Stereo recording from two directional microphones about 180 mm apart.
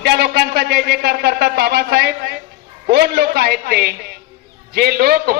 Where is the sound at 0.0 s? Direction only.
65° right (ahead or behind).